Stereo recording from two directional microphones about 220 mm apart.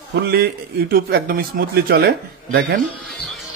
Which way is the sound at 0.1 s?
45° right (ahead or behind).